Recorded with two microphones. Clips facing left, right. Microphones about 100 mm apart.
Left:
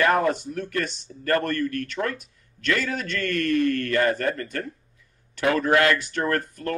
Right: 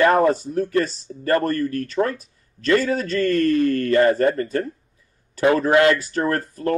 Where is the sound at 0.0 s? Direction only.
30° right (ahead or behind).